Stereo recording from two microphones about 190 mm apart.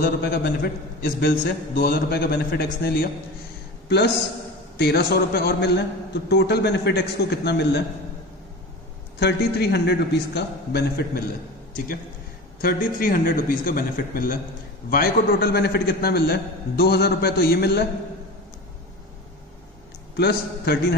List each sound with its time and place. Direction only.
0.0 s a man's voice: 55° left (ahead or behind)
4.7 s a man's voice: 60° left (ahead or behind)
9.2 s a man's voice: 60° left (ahead or behind)
12.6 s a man's voice: 50° left (ahead or behind)
20.2 s a man's voice: 60° left (ahead or behind)